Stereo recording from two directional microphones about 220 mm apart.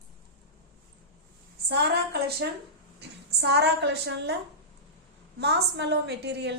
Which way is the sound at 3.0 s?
50° right (ahead or behind).